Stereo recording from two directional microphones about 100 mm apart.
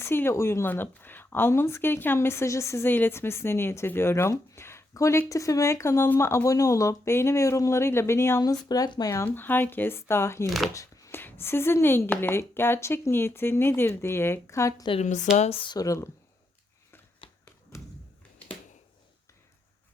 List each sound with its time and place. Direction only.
0.0 s speech: 25° left (ahead or behind)
8.4 s speech: 40° left (ahead or behind)
9.2 s speech: 20° left (ahead or behind)
10.8 s chopping: 30° left (ahead or behind)
11.2 s speech: 20° left (ahead or behind)
15.4 s speech: 65° left (ahead or behind)
15.7 s speech: 35° left (ahead or behind)